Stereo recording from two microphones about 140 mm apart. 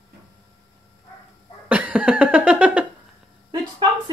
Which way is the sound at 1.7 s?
10° right (ahead or behind).